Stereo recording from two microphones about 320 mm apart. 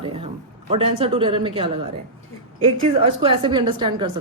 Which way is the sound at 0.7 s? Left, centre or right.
Centre.